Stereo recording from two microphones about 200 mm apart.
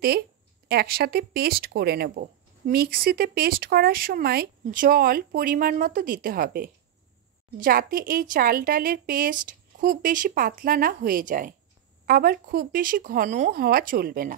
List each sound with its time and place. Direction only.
0.7 s speech: 50° right (ahead or behind)